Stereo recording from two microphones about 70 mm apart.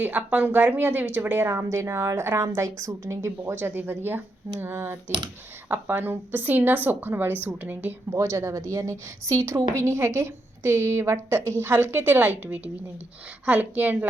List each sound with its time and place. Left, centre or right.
0.0 s a woman's voice: right
3.6 s a woman's voice: right
8.1 s a woman's voice: right